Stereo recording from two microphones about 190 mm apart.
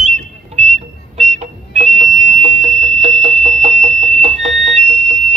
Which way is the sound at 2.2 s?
35° right (ahead or behind).